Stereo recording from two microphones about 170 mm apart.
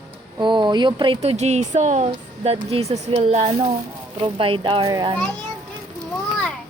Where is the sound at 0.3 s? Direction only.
25° right (ahead or behind).